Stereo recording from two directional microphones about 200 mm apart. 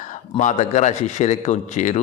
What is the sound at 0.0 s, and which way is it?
Speech, 40° left (ahead or behind).